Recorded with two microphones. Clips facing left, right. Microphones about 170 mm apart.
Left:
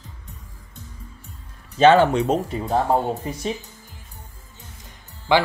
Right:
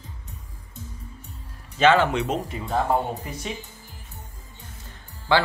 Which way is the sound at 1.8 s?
35° left (ahead or behind).